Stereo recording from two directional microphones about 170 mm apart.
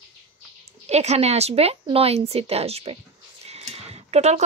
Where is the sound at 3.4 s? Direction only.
35° right (ahead or behind).